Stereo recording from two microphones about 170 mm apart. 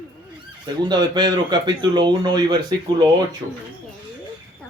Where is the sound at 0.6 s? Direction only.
25° right (ahead or behind).